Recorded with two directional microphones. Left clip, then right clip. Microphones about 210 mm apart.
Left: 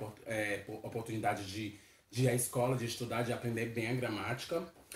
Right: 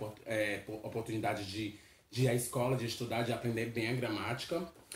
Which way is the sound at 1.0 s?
10° left (ahead or behind).